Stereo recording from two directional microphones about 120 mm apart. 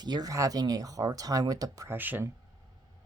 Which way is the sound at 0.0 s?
35° right (ahead or behind).